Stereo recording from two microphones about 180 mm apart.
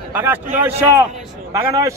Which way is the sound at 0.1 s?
10° right (ahead or behind).